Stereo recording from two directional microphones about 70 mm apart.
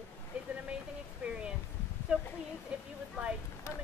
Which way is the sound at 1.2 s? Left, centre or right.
Centre.